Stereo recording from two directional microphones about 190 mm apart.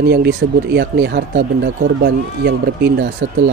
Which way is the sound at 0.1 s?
60° right (ahead or behind).